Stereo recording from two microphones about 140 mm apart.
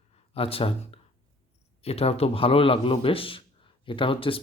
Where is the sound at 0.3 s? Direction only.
45° left (ahead or behind).